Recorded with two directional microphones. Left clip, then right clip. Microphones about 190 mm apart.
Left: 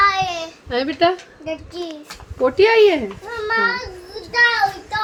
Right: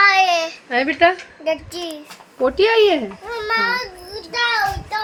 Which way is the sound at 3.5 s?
70° right (ahead or behind).